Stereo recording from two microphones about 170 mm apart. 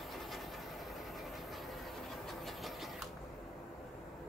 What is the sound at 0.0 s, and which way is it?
Train, centre (ahead or behind).